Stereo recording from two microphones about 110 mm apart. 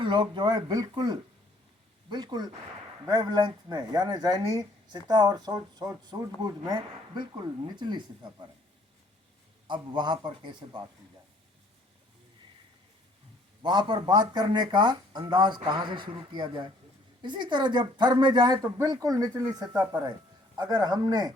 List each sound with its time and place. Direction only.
0.0 s speech: 45° right (ahead or behind)
9.6 s speech: 45° right (ahead or behind)
13.6 s speech: 40° right (ahead or behind)